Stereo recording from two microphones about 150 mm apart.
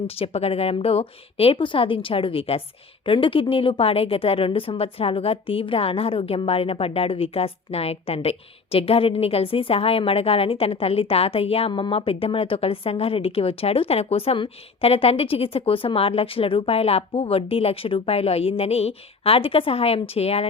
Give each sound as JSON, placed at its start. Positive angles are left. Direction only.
{"t": 0.1, "sound": "a woman's voice", "side_deg": 40}